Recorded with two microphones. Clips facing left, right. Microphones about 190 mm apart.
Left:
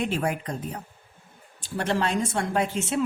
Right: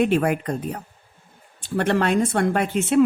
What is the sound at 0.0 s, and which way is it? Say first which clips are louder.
Speech: right 7 dB; 60° right (ahead or behind).